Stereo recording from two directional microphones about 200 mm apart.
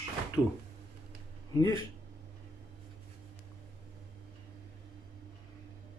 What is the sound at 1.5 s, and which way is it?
Speech, 20° left (ahead or behind).